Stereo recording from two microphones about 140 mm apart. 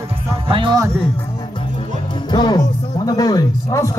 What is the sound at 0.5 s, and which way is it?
Music, 35° right (ahead or behind).